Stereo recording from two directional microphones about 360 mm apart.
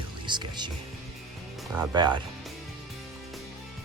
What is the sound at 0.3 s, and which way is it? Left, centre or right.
Speech, centre.